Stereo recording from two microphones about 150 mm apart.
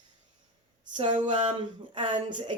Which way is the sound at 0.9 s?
35° right (ahead or behind).